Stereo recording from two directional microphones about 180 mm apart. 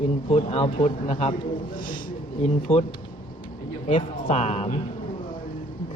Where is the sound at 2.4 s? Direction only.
35° left (ahead or behind).